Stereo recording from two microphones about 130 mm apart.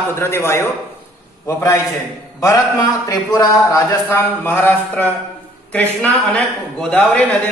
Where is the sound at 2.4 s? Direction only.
25° left (ahead or behind).